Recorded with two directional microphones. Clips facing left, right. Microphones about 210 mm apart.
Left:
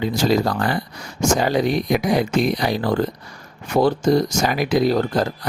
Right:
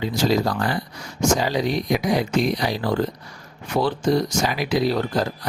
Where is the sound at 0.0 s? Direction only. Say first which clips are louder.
Left 2 dB; 55° left (ahead or behind).